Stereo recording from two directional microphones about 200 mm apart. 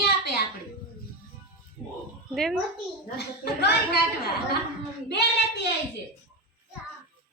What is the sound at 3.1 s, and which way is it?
Speech, 50° left (ahead or behind).